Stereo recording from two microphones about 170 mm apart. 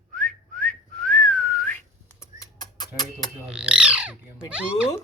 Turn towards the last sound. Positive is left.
turn(degrees=-5)  # may be behind; listen again after turning